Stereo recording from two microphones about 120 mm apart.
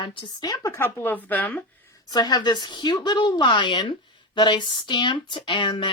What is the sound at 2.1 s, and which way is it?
Speech, 35° left (ahead or behind).